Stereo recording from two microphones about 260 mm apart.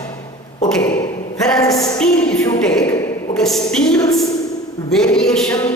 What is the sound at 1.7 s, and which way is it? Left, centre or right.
A woman's voice, centre.